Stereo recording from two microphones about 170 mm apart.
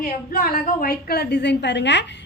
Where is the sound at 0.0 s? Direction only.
60° left (ahead or behind).